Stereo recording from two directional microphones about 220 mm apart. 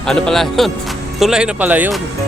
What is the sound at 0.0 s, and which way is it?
Speech, 5° left (ahead or behind).